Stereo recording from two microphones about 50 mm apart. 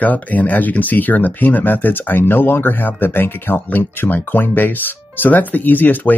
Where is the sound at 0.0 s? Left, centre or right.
Left.